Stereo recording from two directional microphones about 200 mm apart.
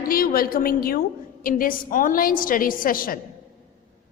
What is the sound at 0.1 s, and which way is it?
A woman's voice, 45° left (ahead or behind).